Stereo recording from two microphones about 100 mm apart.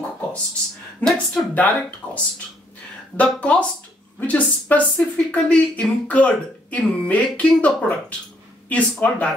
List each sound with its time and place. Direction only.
1.0 s speech: 10° left (ahead or behind)
3.2 s speech: 15° left (ahead or behind)